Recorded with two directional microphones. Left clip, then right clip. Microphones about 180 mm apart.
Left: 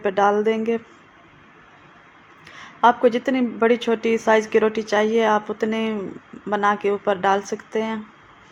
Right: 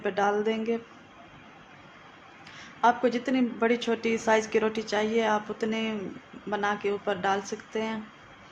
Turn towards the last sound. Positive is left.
turn(degrees=25)  # may be behind; listen again after turning